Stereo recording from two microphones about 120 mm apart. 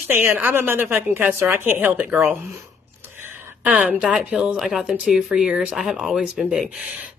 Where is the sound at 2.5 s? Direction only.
20° right (ahead or behind).